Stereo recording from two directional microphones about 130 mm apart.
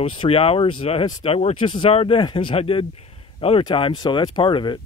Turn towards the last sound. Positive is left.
turn(degrees=40)  # may be behind; listen again after turning